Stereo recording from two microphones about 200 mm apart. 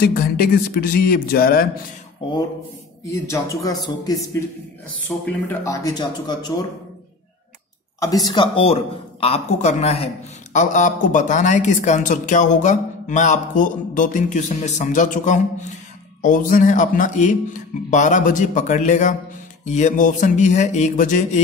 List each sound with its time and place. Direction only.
0.0 s speech: 50° left (ahead or behind)
3.1 s a man's voice: 15° left (ahead or behind)
8.0 s a woman's voice: 20° left (ahead or behind); by 21.4 s 40° left (ahead or behind)